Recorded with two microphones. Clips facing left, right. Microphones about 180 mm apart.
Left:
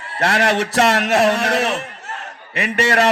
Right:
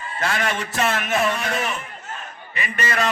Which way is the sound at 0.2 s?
75° left (ahead or behind).